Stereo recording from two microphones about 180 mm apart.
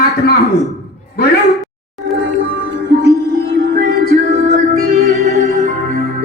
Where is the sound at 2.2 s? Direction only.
80° right; by 4.1 s 65° right (ahead or behind).